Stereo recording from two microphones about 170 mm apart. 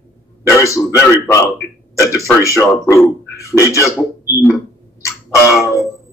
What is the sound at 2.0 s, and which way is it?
Speech, 20° left (ahead or behind).